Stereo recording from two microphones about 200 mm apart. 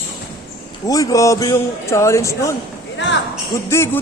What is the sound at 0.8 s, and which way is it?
A man's voice, 15° left (ahead or behind).